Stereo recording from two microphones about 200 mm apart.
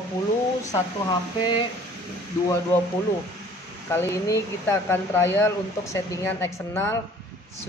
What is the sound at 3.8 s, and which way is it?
Speech, 10° left (ahead or behind).